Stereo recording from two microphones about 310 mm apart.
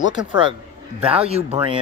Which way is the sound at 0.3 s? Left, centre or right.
Centre.